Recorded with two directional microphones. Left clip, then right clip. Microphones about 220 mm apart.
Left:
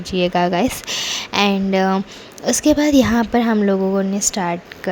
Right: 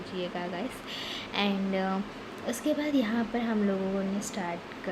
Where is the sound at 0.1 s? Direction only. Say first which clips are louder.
Left 18 dB; 50° left (ahead or behind).